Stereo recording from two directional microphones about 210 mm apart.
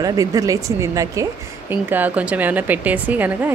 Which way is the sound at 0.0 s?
15° right (ahead or behind).